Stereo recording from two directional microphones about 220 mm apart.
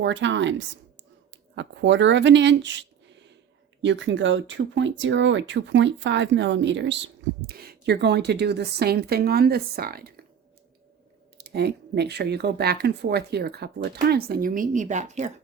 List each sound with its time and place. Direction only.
0.0 s speech: 55° right (ahead or behind)
11.4 s speech: 50° right (ahead or behind); by 15.3 s 30° right (ahead or behind)